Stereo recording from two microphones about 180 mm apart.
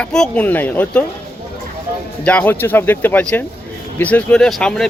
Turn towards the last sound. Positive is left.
turn(degrees=5)  # may be behind; listen again after turning